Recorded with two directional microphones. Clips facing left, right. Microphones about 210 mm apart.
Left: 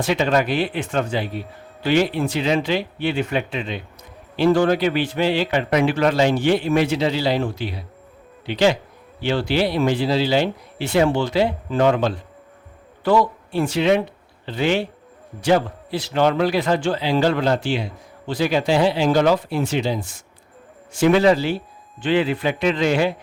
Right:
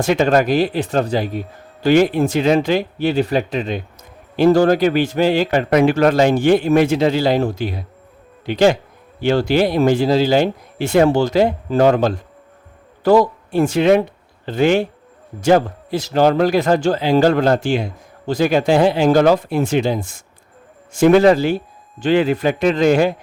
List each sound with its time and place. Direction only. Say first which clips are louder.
0.0 s speech: right 4 dB; 45° right (ahead or behind)